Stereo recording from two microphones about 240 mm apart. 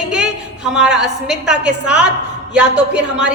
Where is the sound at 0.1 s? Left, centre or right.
Centre.